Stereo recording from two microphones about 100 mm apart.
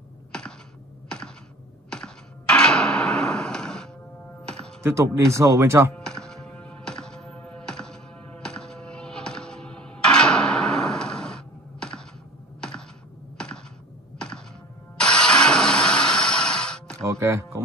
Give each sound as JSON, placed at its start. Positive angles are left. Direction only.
{"t": 0.3, "sound": "computer keyboard", "side_deg": 10}
{"t": 1.9, "sound": "music", "side_deg": 10}
{"t": 4.8, "sound": "speech", "side_deg": -30}
{"t": 5.9, "sound": "music", "side_deg": 5}
{"t": 12.5, "sound": "computer keyboard", "side_deg": 10}
{"t": 14.1, "sound": "thunk", "side_deg": 10}
{"t": 15.0, "sound": "music", "side_deg": 10}
{"t": 17.0, "sound": "music", "side_deg": -30}